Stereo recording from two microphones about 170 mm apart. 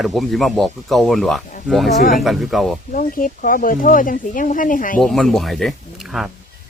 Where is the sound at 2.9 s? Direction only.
50° left (ahead or behind).